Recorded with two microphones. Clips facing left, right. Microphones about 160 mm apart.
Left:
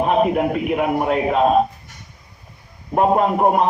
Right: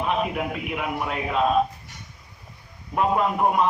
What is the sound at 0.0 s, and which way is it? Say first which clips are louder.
A man's voice: left 8 dB; 45° left (ahead or behind).